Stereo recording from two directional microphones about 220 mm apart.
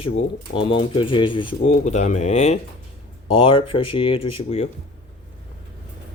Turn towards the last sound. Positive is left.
turn(degrees=25)  # may be behind; listen again after turning